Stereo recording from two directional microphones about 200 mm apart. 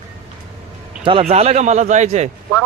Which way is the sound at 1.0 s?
30° right (ahead or behind).